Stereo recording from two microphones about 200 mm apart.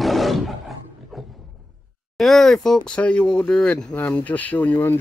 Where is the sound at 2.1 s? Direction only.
Centre (ahead or behind).